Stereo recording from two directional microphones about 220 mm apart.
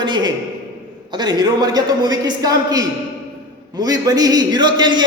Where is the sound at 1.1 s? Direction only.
20° right (ahead or behind).